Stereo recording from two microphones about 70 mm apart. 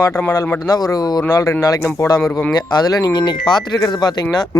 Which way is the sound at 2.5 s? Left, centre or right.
Left.